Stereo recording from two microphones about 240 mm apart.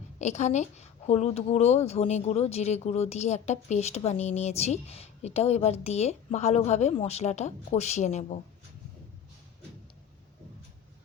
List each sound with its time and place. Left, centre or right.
0.2 s speech: left